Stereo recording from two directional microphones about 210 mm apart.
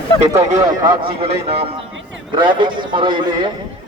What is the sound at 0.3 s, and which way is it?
A man's voice, 20° right (ahead or behind).